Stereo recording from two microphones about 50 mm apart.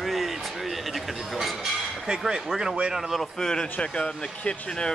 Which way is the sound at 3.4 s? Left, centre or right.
Centre.